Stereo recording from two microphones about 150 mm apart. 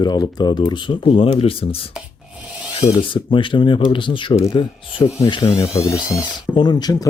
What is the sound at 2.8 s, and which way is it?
Speech, 35° left (ahead or behind).